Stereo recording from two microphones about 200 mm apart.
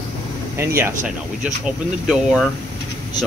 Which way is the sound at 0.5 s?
10° right (ahead or behind).